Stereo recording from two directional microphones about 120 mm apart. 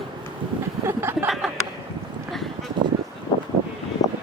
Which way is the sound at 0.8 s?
20° right (ahead or behind).